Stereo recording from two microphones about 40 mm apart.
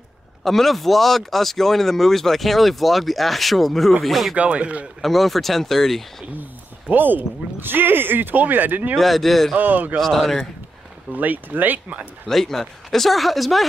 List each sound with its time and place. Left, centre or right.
0.4 s speech: centre
4.4 s speech: right
5.0 s speech: centre
6.9 s speech: right
8.9 s speech: centre
9.6 s speech: right
9.9 s speech: centre
11.1 s speech: right
12.3 s speech: centre